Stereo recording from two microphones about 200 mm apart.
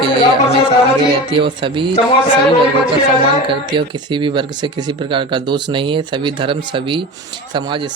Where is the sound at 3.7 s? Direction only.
25° right (ahead or behind).